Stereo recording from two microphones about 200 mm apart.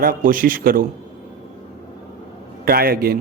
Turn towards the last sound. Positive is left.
turn(degrees=-50)  # may be behind; listen again after turning